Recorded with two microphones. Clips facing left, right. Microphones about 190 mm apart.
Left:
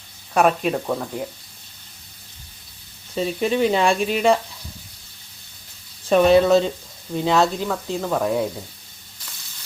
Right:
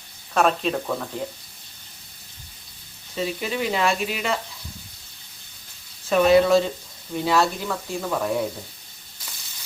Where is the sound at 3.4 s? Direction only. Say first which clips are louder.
Left 7 dB; 30° left (ahead or behind).